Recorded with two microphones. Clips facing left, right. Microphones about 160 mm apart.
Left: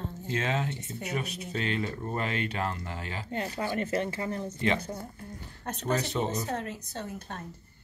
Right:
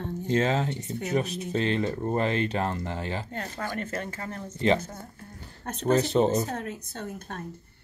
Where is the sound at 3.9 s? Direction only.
50° right (ahead or behind).